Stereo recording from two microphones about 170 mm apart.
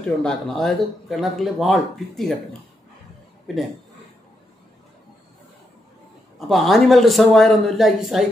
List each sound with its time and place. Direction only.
0.2 s speech: 5° left (ahead or behind)
3.5 s speech: centre (ahead or behind)
6.5 s speech: centre (ahead or behind)